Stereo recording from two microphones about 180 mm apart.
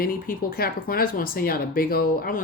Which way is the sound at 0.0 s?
55° left (ahead or behind).